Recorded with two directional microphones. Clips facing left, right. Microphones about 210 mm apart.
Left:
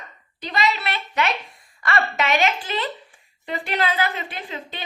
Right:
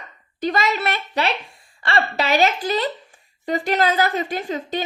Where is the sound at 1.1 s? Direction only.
35° right (ahead or behind).